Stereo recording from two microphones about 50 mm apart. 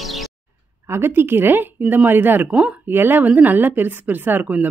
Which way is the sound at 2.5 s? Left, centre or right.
Right.